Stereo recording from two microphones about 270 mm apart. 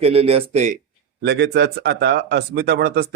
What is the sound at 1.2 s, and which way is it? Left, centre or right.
A man's voice, right.